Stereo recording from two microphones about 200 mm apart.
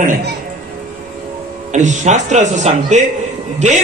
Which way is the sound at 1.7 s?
35° right (ahead or behind).